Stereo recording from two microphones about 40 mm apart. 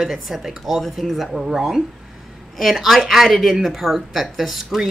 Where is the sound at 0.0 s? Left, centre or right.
Centre.